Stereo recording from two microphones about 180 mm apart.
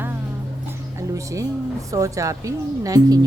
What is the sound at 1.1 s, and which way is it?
Speech, 15° right (ahead or behind).